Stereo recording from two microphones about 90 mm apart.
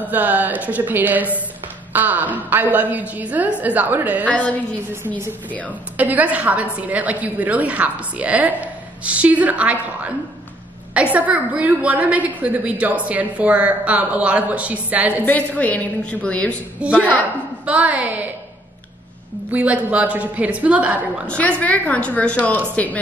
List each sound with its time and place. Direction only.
0.0 s a woman's voice: 20° right (ahead or behind)
4.3 s a woman's voice: 15° left (ahead or behind)
5.9 s a woman's voice: 15° right (ahead or behind)
15.2 s a woman's voice: 15° left (ahead or behind)
16.8 s a woman's voice: 15° right (ahead or behind)
19.5 s a woman's voice: 15° right (ahead or behind)
21.3 s a woman's voice: 15° left (ahead or behind)